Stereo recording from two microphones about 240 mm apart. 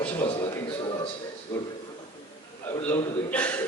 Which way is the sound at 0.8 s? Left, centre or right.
Left.